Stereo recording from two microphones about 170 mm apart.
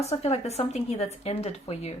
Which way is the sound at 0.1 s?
40° left (ahead or behind).